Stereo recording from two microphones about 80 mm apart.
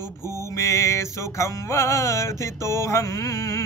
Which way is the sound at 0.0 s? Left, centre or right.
Left.